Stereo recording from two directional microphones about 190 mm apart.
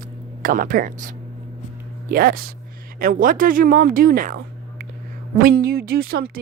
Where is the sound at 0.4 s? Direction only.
45° right (ahead or behind).